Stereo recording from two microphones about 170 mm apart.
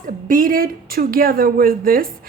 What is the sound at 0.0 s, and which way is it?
Speech, 55° right (ahead or behind).